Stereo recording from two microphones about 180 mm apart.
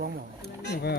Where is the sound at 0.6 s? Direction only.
65° left (ahead or behind).